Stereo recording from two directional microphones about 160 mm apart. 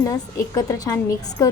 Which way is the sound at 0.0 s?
20° left (ahead or behind).